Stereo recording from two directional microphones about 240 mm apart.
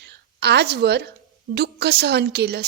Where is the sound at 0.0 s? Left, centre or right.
Right.